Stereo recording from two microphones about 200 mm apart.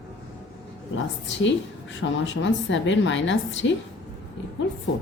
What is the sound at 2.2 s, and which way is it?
A woman's voice, 70° left (ahead or behind).